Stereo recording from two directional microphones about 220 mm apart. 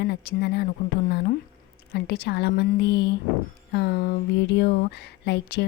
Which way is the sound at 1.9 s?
50° left (ahead or behind).